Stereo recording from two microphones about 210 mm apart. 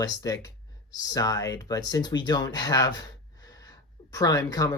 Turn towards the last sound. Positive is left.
turn(degrees=15)  # may be behind; listen again after turning